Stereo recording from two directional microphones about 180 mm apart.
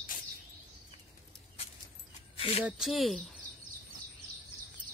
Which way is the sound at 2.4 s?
35° left (ahead or behind).